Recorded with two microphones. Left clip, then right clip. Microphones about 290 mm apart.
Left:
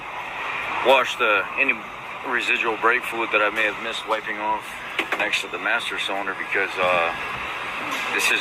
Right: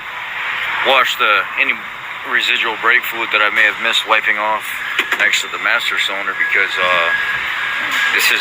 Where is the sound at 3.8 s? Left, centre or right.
Right.